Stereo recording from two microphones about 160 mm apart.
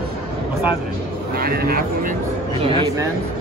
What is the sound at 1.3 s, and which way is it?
Speech, 70° right (ahead or behind).